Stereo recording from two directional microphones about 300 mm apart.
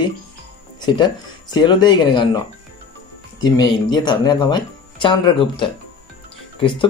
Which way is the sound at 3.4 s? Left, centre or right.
Centre.